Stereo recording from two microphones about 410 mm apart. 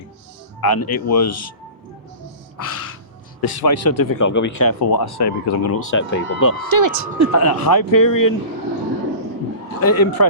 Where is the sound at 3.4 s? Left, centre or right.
Left.